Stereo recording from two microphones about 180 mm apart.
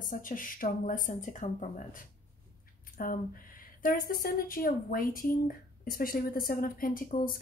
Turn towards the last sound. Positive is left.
turn(degrees=50)  # may be behind; listen again after turning